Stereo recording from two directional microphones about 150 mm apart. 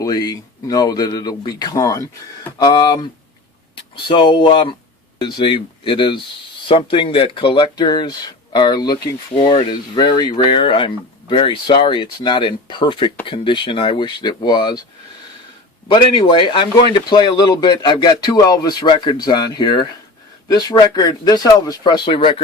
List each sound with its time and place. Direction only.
0.0 s speech: 25° left (ahead or behind)
15.9 s speech: 35° left (ahead or behind)